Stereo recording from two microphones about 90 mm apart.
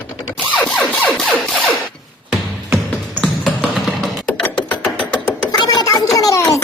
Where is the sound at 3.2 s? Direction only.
5° left (ahead or behind).